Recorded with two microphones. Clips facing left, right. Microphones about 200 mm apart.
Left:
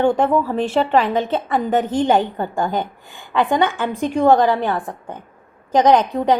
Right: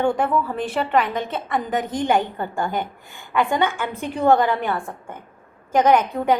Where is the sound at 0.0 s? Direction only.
25° left (ahead or behind).